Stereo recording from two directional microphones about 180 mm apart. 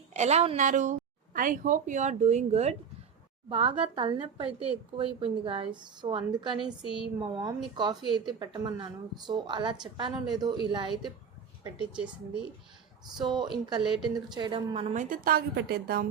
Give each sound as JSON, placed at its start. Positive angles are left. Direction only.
{"t": 0.1, "sound": "a woman's voice", "side_deg": -40}
{"t": 13.7, "sound": "a woman's voice", "side_deg": -25}
{"t": 15.1, "sound": "a woman's voice", "side_deg": -50}